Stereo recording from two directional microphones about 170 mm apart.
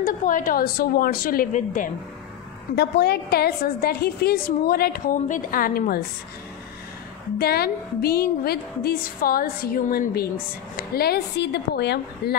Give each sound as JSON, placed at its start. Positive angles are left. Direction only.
{"t": 0.0, "sound": "a woman's voice", "side_deg": 50}
{"t": 2.7, "sound": "a woman's voice", "side_deg": 75}
{"t": 7.3, "sound": "a woman's voice", "side_deg": 65}